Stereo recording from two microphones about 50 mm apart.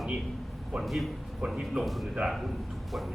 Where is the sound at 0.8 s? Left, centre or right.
Centre.